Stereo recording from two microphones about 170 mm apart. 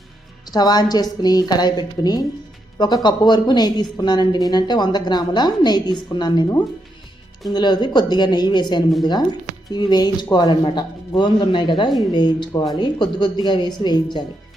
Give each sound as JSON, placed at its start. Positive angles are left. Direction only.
{"t": 0.4, "sound": "speech", "side_deg": 25}